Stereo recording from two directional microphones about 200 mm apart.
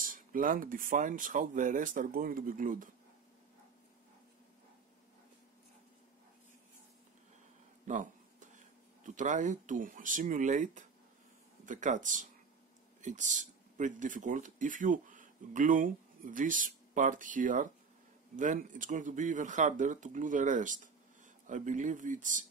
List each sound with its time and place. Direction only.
0.0 s speech: 45° right (ahead or behind)
7.8 s a sound: 40° right (ahead or behind)
11.6 s speech: 40° right (ahead or behind)